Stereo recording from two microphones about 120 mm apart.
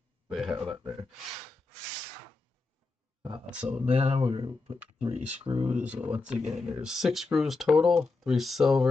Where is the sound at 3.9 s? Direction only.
60° right (ahead or behind).